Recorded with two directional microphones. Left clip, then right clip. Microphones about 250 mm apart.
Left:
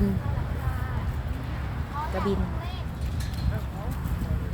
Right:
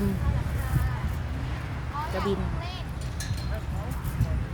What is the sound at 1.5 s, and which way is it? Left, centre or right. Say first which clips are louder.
Vehicle: even; right.